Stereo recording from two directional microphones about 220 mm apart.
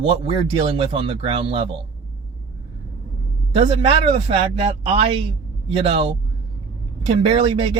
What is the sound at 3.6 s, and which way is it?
Speech, 25° right (ahead or behind).